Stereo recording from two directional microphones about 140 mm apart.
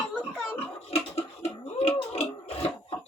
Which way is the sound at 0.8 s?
45° left (ahead or behind).